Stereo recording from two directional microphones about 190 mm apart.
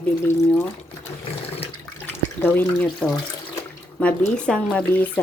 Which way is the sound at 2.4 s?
10° left (ahead or behind).